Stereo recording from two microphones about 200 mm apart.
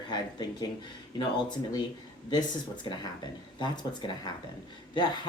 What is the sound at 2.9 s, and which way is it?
Speech, 20° left (ahead or behind).